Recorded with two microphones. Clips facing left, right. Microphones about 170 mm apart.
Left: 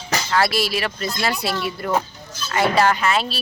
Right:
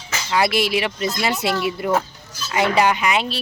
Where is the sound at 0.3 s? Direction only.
15° right (ahead or behind).